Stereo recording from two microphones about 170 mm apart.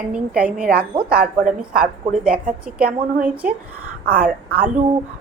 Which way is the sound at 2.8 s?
60° right (ahead or behind).